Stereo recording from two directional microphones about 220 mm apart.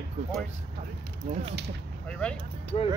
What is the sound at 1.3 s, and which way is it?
Speech, 30° right (ahead or behind).